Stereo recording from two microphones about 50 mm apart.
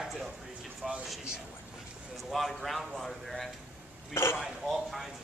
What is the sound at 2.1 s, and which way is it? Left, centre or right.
Speech, centre.